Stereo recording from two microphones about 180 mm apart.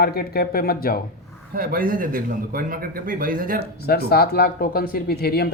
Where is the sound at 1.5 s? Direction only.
50° right (ahead or behind).